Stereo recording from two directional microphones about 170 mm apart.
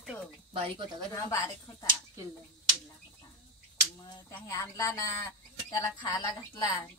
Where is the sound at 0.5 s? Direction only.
30° right (ahead or behind).